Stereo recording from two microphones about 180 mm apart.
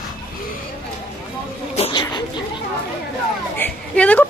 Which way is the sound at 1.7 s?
30° left (ahead or behind).